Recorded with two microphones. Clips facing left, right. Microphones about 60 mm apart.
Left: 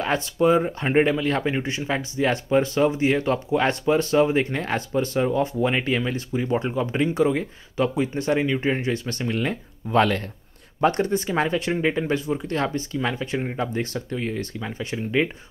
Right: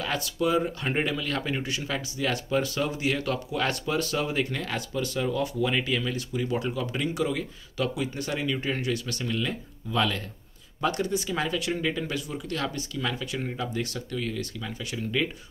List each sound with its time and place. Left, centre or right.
0.0 s speech: left